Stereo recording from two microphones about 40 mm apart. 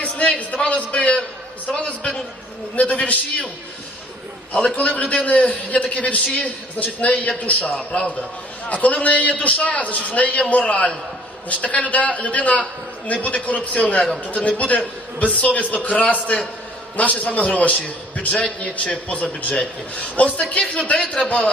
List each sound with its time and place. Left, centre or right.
0.0 s a man's voice: left
4.5 s a man's voice: left
4.9 s a man's voice: left